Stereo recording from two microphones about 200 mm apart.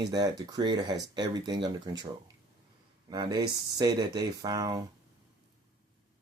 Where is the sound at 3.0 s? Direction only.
20° right (ahead or behind).